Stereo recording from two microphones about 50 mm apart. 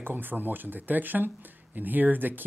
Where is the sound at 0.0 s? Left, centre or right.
Right.